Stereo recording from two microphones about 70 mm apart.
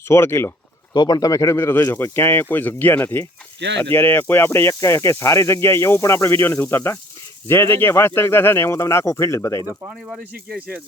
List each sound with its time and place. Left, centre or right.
0.1 s speech: left
0.9 s speech: left
1.3 s speech: left
4.7 s speech: left